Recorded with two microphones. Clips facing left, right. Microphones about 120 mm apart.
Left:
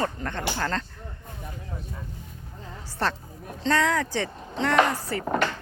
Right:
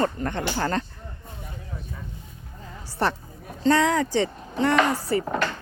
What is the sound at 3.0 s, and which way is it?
Speech, 15° right (ahead or behind).